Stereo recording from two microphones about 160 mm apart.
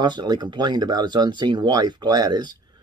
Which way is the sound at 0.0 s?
30° right (ahead or behind).